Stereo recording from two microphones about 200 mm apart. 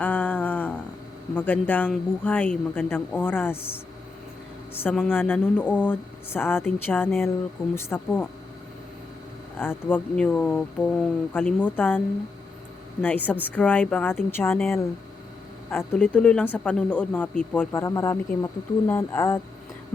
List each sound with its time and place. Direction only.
0.0 s a sound: 10° left (ahead or behind)
1.4 s speech: 10° left (ahead or behind)
4.8 s speech: 10° left (ahead or behind)
9.6 s speech: 10° left (ahead or behind)